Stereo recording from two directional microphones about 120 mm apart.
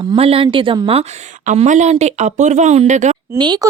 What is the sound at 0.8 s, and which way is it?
A woman's voice, 55° right (ahead or behind).